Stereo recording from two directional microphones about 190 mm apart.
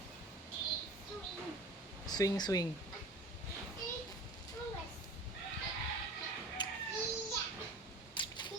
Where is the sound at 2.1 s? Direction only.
20° left (ahead or behind).